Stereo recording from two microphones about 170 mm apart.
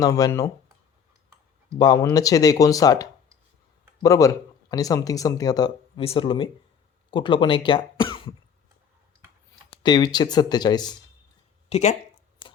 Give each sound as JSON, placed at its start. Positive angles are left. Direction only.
{"t": 0.0, "sound": "speech", "side_deg": 20}
{"t": 1.8, "sound": "speech", "side_deg": 25}
{"t": 6.0, "sound": "speech", "side_deg": 35}
{"t": 9.6, "sound": "speech", "side_deg": 25}
{"t": 11.7, "sound": "speech", "side_deg": 40}